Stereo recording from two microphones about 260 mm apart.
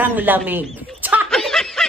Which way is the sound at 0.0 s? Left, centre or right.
Centre.